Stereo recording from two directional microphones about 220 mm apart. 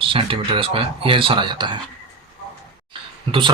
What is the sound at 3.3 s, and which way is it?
Speech, 20° right (ahead or behind).